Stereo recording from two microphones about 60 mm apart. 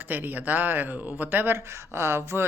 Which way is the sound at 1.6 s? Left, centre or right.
Right.